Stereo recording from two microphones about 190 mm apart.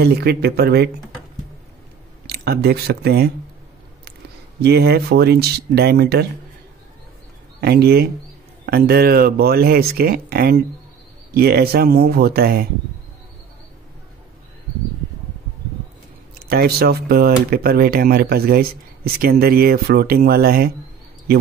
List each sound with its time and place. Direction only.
0.0 s speech: 55° right (ahead or behind)
2.2 s speech: 55° right (ahead or behind)
4.6 s speech: 60° right (ahead or behind)
7.6 s speech: 55° right (ahead or behind)
16.4 s speech: 55° right (ahead or behind)